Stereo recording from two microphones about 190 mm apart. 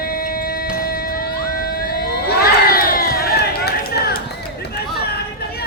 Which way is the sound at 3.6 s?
55° left (ahead or behind).